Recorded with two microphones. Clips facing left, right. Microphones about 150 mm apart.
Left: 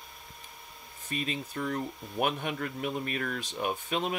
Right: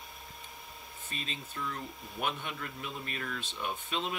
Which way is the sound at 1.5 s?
55° left (ahead or behind).